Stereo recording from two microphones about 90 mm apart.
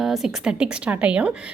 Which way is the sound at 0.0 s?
5° right (ahead or behind).